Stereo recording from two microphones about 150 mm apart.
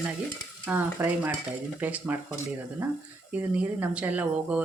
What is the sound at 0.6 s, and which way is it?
Speech, 10° right (ahead or behind).